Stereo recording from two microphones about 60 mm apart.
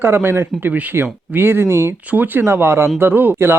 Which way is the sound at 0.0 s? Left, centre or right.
Right.